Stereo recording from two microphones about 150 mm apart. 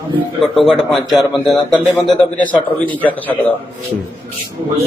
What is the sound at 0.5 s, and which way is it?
A man's voice, centre (ahead or behind).